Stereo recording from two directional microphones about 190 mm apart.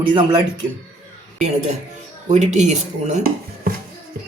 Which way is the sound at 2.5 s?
40° right (ahead or behind).